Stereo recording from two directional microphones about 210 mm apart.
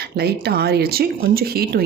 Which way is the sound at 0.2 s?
50° right (ahead or behind).